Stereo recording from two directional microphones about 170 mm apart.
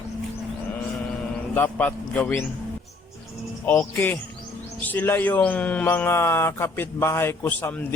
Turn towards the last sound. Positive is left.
turn(degrees=10)  # may be behind; listen again after turning